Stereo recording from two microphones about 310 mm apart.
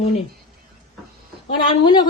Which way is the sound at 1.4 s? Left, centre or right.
Centre.